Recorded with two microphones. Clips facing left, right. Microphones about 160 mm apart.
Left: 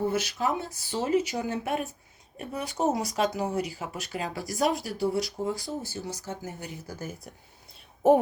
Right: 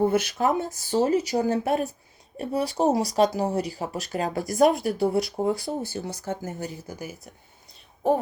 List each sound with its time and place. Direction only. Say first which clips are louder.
0.0 s speech: right 5 dB; 55° right (ahead or behind)
6.8 s speech: right 2 dB; 15° right (ahead or behind)